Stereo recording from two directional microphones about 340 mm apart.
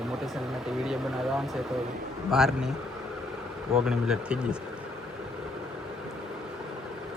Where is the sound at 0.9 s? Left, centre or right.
Centre.